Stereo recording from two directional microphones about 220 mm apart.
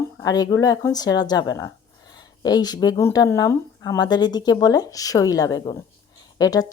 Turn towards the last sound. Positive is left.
turn(degrees=15)  # may be behind; listen again after turning